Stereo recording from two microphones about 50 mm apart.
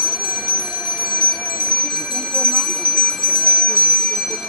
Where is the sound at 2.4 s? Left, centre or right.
Left.